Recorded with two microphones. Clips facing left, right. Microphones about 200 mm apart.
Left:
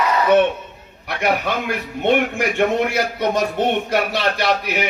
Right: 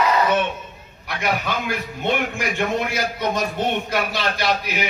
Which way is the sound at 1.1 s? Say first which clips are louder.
Left 4 dB; 60° left (ahead or behind).